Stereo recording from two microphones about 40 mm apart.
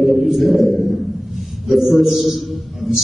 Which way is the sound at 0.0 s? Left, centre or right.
Centre.